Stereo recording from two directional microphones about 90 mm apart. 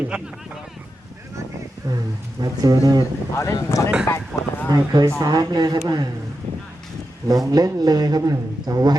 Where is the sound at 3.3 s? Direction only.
35° left (ahead or behind).